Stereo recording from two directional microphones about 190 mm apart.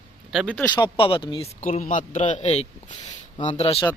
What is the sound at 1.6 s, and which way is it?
A man's voice, 45° left (ahead or behind).